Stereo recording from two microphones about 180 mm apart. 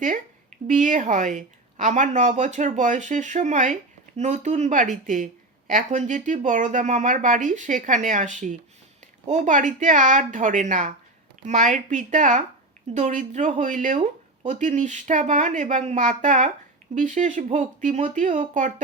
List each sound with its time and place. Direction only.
0.7 s a woman's voice: 45° right (ahead or behind)